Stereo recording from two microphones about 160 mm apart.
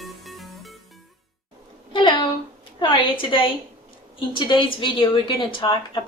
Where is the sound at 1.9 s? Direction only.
30° left (ahead or behind).